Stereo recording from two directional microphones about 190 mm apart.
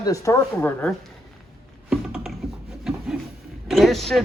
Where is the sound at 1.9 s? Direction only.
5° right (ahead or behind).